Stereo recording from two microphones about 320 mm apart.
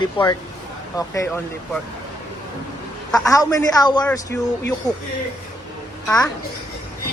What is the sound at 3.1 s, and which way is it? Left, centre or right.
Speech, centre.